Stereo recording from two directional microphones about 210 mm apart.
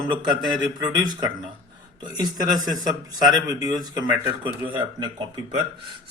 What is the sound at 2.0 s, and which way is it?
Speech, 20° right (ahead or behind).